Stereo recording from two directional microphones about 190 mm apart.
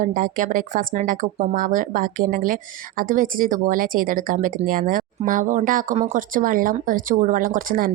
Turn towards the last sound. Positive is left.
turn(degrees=-50)  # may be behind; listen again after turning